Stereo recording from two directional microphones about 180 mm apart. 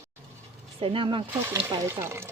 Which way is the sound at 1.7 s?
15° right (ahead or behind).